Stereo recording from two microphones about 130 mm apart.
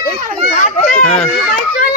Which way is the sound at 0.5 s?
75° left (ahead or behind).